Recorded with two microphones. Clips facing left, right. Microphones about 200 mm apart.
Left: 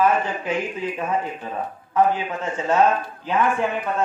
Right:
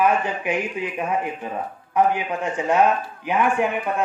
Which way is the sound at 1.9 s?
15° right (ahead or behind).